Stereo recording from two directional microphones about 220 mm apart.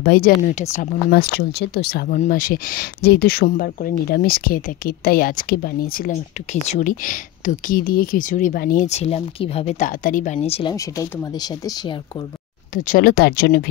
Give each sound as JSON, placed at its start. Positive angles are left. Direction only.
{"t": 0.0, "sound": "speech", "side_deg": 40}
{"t": 12.7, "sound": "speech", "side_deg": 40}